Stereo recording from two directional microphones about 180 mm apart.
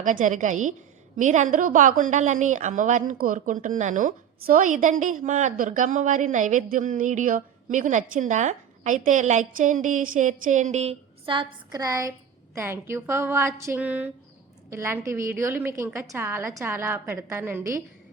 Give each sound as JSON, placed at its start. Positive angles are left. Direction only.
{"t": 0.0, "sound": "a woman's voice", "side_deg": -45}